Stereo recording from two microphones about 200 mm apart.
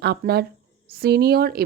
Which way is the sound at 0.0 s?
55° right (ahead or behind).